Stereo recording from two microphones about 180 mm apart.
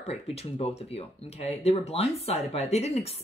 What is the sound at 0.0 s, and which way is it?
Speech, 35° left (ahead or behind).